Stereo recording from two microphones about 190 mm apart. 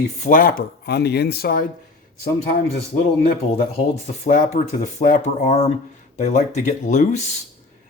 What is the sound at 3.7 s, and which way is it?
Speech, 40° left (ahead or behind).